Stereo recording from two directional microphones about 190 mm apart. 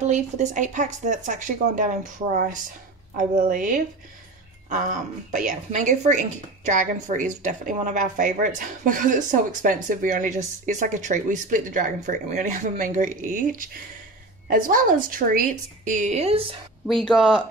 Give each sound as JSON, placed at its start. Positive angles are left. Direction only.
{"t": 0.0, "sound": "a woman's voice", "side_deg": -40}
{"t": 16.8, "sound": "speech", "side_deg": 0}